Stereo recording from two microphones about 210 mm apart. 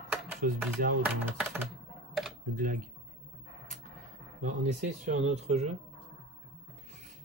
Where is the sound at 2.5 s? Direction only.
40° right (ahead or behind).